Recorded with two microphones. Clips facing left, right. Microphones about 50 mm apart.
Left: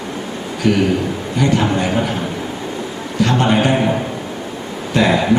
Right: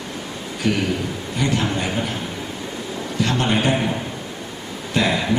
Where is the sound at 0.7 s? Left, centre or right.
Centre.